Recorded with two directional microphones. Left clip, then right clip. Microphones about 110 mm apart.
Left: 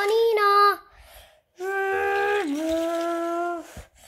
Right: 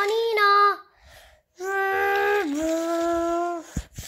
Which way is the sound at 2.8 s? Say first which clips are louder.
Right 2 dB; 10° right (ahead or behind).